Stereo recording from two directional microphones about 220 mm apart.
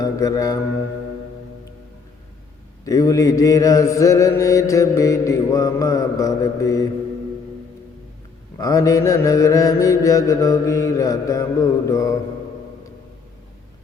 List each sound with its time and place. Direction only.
0.0 s mantra: 15° left (ahead or behind)
2.8 s mantra: 15° left (ahead or behind)
8.5 s mantra: 15° left (ahead or behind)